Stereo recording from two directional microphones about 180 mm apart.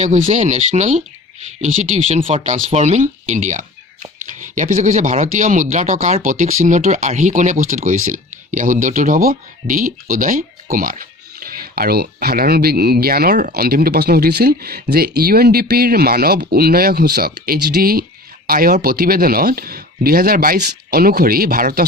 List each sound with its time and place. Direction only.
0.0 s speech: 40° right (ahead or behind)